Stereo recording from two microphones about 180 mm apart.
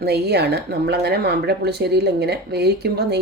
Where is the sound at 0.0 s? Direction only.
65° right (ahead or behind).